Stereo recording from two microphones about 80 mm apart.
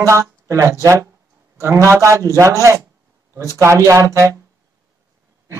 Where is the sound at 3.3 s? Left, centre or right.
Right.